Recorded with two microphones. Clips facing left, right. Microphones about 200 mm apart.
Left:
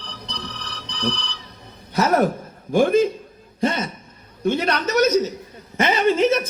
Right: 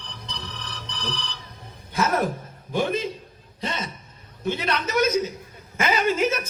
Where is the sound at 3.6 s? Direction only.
45° left (ahead or behind).